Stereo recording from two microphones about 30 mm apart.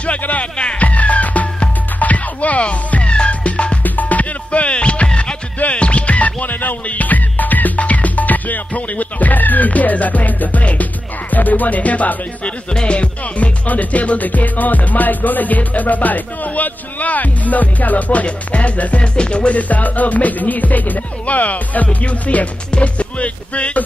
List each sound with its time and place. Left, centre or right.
0.2 s music: left
2.6 s music: left
3.8 s music: left
4.5 s music: left
6.9 s music: left
12.8 s music: left
13.7 s music: left
19.1 s music: left
19.5 s music: left
22.7 s music: left